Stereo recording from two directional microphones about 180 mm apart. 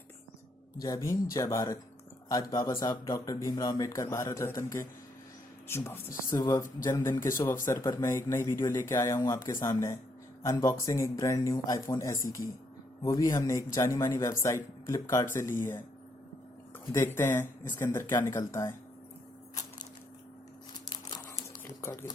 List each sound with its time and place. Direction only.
0.8 s speech: 20° left (ahead or behind)
16.8 s speech: 15° left (ahead or behind)
20.9 s crumpling: 20° left (ahead or behind)
21.6 s a sound: 15° left (ahead or behind)